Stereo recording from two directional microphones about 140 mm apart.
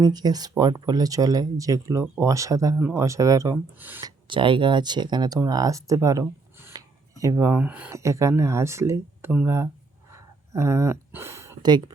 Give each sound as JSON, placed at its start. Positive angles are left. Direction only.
{"t": 0.0, "sound": "speech", "side_deg": -30}
{"t": 3.8, "sound": "speech", "side_deg": -15}
{"t": 4.0, "sound": "speech", "side_deg": -35}
{"t": 7.9, "sound": "speech", "side_deg": -20}
{"t": 10.1, "sound": "a sound", "side_deg": -20}